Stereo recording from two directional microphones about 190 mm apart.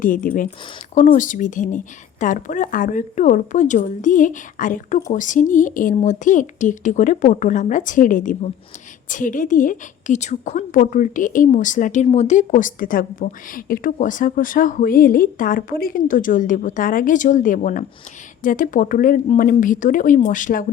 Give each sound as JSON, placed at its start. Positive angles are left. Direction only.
{"t": 0.0, "sound": "a woman's voice", "side_deg": 45}